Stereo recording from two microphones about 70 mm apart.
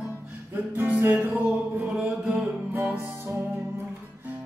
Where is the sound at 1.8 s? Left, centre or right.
Centre.